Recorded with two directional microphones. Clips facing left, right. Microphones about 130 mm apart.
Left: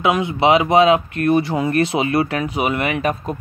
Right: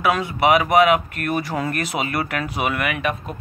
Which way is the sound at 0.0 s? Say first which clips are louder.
Left 2 dB; 20° left (ahead or behind).